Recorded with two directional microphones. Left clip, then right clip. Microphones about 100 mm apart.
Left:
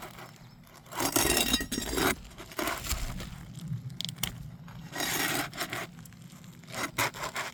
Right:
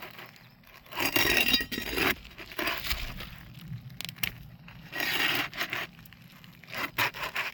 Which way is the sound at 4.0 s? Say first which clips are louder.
Right 1 dB; 40° left (ahead or behind).